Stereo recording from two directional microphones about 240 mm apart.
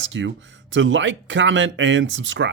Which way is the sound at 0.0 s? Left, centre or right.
Right.